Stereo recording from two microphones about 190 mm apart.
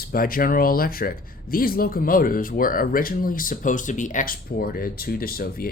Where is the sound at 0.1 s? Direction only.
50° left (ahead or behind).